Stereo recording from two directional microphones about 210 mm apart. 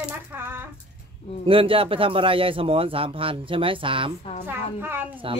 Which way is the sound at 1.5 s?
25° right (ahead or behind).